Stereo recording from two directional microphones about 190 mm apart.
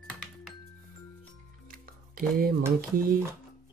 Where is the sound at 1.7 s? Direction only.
50° right (ahead or behind).